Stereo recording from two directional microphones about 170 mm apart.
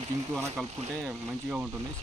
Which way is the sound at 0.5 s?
Centre (ahead or behind).